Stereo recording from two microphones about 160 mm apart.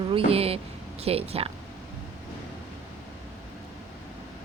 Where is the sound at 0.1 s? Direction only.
40° right (ahead or behind).